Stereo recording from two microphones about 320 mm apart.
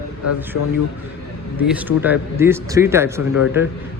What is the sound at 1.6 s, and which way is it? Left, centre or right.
A man's voice, centre.